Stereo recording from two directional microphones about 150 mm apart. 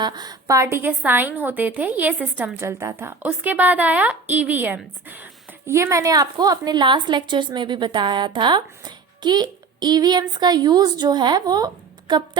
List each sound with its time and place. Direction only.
0.0 s a woman's voice: 25° right (ahead or behind)